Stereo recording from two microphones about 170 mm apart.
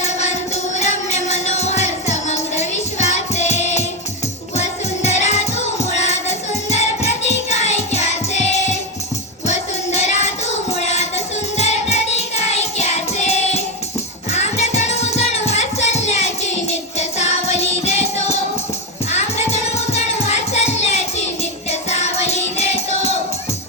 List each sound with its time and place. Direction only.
0.0 s music: 40° left (ahead or behind)
9.5 s child singing: 40° left (ahead or behind)
11.5 s music: 40° left (ahead or behind)
19.7 s music: 40° left (ahead or behind)